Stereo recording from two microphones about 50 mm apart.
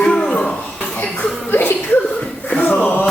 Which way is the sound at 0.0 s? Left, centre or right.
Centre.